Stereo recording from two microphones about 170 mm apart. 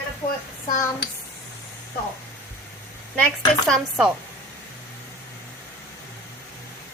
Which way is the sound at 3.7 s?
5° right (ahead or behind).